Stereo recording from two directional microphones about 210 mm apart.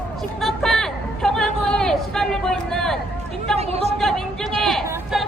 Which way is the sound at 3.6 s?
30° right (ahead or behind).